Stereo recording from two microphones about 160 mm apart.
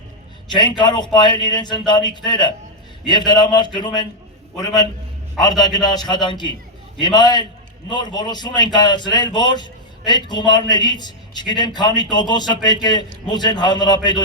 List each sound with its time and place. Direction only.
0.5 s a man's voice: 25° left (ahead or behind)